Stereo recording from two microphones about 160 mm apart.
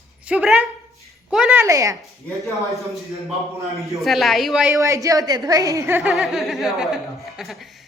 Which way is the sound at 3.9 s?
Centre (ahead or behind).